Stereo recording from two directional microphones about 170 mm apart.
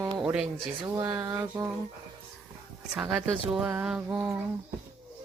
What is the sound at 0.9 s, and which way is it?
Speech, 20° right (ahead or behind).